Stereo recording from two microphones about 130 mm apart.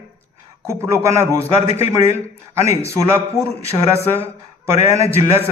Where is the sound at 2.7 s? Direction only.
20° right (ahead or behind).